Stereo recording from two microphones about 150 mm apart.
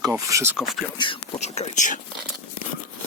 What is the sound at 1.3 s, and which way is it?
Speech, 45° left (ahead or behind).